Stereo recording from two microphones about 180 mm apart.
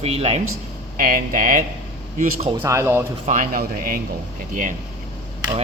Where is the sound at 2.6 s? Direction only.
15° right (ahead or behind).